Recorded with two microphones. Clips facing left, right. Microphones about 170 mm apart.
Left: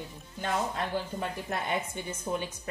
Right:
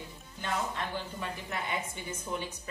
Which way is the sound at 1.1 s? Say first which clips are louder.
Left 4 dB; 50° left (ahead or behind).